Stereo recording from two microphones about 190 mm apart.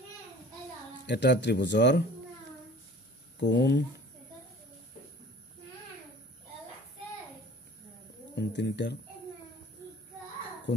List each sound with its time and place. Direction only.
1.0 s speech: 65° left (ahead or behind)
3.3 s speech: 65° left (ahead or behind)
8.4 s speech: 65° left (ahead or behind)